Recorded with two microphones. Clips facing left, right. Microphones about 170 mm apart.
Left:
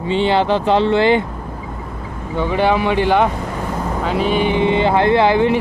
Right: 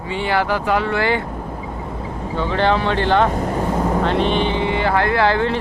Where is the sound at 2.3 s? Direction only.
15° left (ahead or behind).